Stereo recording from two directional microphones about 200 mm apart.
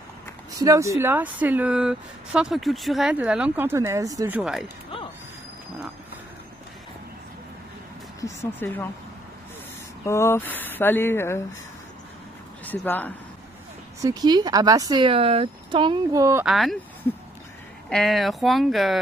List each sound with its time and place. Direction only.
0.6 s speech: 15° right (ahead or behind)
4.4 s speech: centre (ahead or behind)
8.2 s speech: 10° left (ahead or behind)
10.0 s speech: 15° left (ahead or behind)
12.6 s speech: 10° left (ahead or behind)
14.0 s speech: 20° right (ahead or behind)
16.4 s speech: centre (ahead or behind)
17.8 s speech: centre (ahead or behind)